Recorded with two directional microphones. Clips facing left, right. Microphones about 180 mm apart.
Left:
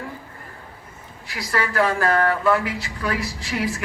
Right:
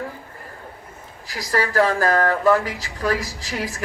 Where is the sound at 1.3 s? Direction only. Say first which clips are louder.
Right 3 dB; 40° right (ahead or behind).